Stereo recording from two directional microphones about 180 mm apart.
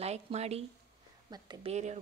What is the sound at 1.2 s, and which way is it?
Speech, 25° right (ahead or behind).